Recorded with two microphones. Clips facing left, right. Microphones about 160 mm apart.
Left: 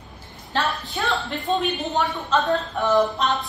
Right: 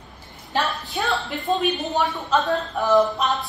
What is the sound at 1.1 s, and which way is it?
A woman's voice, centre (ahead or behind).